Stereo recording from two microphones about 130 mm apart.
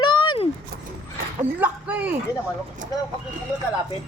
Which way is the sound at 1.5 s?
10° right (ahead or behind).